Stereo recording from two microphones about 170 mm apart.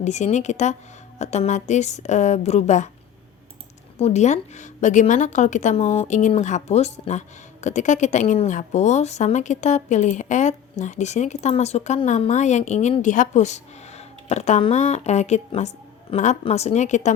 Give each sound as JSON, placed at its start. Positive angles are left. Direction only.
{"t": 0.0, "sound": "a woman's voice", "side_deg": 45}
{"t": 3.9, "sound": "a woman's voice", "side_deg": 40}